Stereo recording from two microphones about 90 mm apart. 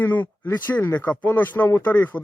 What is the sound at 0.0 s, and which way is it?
Speech, 20° left (ahead or behind).